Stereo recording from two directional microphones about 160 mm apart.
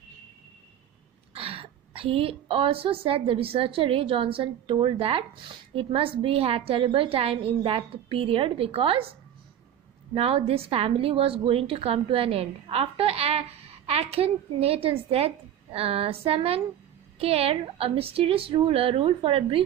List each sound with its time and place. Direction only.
1.3 s a woman's voice: 35° right (ahead or behind)
10.1 s a woman's voice: 40° right (ahead or behind)